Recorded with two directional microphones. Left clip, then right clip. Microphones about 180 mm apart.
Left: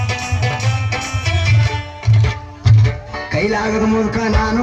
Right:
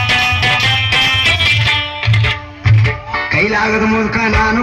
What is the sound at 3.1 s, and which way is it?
Music, 25° right (ahead or behind).